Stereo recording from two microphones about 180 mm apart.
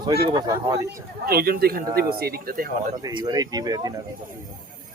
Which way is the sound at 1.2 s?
55° right (ahead or behind).